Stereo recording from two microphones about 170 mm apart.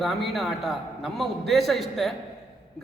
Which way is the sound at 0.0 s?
Centre (ahead or behind).